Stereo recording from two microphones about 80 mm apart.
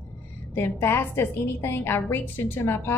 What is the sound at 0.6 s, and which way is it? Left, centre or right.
A woman's voice, left.